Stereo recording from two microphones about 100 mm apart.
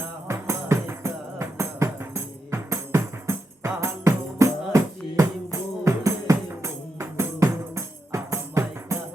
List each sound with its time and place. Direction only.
0.3 s music: 25° right (ahead or behind)